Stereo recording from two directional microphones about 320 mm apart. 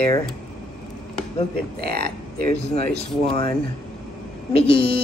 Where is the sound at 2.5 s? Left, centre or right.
Centre.